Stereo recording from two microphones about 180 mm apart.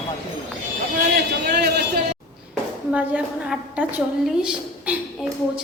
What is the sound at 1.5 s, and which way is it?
Speech, 60° right (ahead or behind).